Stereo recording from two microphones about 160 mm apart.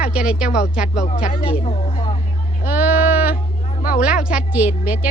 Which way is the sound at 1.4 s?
35° left (ahead or behind).